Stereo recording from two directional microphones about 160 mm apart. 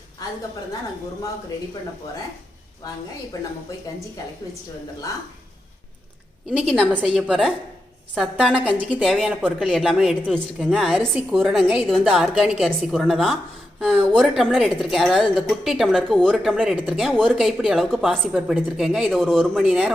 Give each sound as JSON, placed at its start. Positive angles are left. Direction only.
{"t": 0.2, "sound": "a woman's voice", "side_deg": 20}
{"t": 6.5, "sound": "a woman's voice", "side_deg": -5}